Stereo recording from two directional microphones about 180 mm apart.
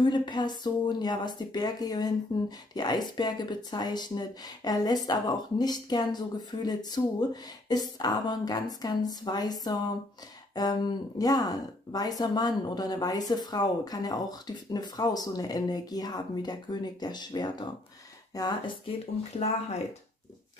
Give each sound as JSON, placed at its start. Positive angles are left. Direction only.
{"t": 0.0, "sound": "speech", "side_deg": 25}
{"t": 19.3, "sound": "speech", "side_deg": 35}